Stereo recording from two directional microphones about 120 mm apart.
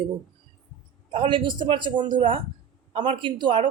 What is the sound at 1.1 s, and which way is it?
Speech, 45° right (ahead or behind).